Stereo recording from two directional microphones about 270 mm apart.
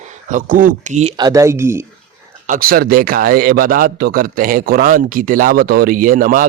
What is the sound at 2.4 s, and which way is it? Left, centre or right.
A man's voice, right.